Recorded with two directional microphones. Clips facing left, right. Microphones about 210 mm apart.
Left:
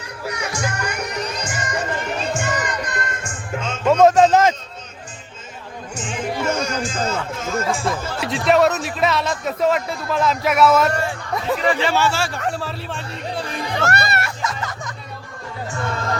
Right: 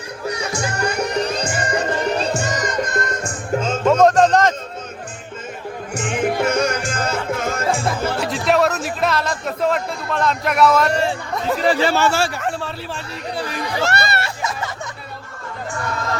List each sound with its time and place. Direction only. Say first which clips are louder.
0.3 s music: right 2 dB; 30° right (ahead or behind)
3.8 s a sound: left 1 dB; centre (ahead or behind)
5.9 s music: right 5 dB; 65° right (ahead or behind)
8.2 s a man's voice: left 2 dB; centre (ahead or behind)
10.9 s speech: right 3 dB; 25° right (ahead or behind); by 12.2 s 50° right (ahead or behind)
12.4 s a man's voice: even; centre (ahead or behind)
13.3 s music: right 2 dB; centre (ahead or behind)
13.9 s music: right 1 dB; 30° right (ahead or behind)